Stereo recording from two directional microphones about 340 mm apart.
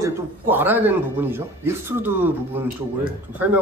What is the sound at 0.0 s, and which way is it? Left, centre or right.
A man's voice, centre.